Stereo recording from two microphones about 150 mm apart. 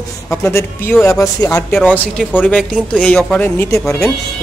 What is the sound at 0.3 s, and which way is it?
Speech, 20° left (ahead or behind).